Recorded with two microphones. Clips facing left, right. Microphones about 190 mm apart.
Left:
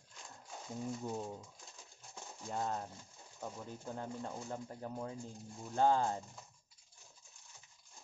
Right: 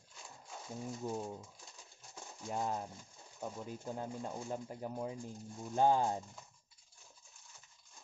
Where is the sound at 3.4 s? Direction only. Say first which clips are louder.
Right 2 dB; 10° right (ahead or behind).